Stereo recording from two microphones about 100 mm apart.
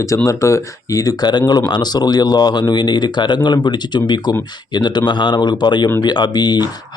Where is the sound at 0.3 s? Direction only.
30° left (ahead or behind).